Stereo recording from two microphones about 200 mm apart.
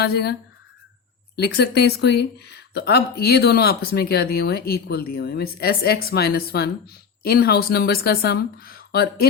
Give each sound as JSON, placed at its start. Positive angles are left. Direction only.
{"t": 0.0, "sound": "speech", "side_deg": 55}
{"t": 1.4, "sound": "speech", "side_deg": 55}